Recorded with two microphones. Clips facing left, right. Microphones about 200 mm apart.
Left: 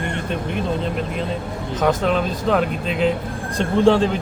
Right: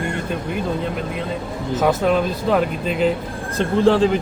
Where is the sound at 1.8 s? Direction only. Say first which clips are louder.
Right 1 dB; 5° right (ahead or behind).